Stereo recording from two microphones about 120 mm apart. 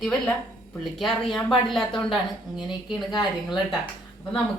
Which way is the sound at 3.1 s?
40° left (ahead or behind).